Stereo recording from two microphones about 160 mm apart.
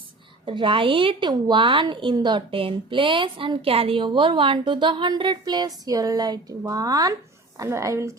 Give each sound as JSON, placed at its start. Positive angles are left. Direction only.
{"t": 0.4, "sound": "a woman's voice", "side_deg": -35}